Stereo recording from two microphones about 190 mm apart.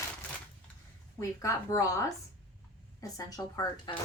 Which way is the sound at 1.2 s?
15° left (ahead or behind).